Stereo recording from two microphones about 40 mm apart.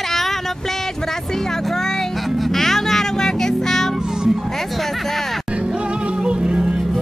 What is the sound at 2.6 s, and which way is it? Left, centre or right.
Music, centre.